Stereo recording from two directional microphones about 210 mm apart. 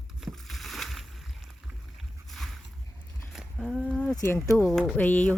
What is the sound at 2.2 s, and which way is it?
Boat, centre (ahead or behind).